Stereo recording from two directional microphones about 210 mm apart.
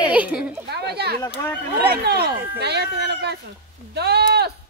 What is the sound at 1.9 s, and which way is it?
Speech, 50° right (ahead or behind).